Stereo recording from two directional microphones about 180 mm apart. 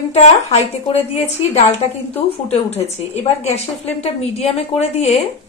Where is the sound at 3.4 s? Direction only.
35° left (ahead or behind).